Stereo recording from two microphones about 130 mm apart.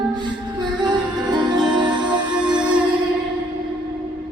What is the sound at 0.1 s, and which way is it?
Music, 35° right (ahead or behind).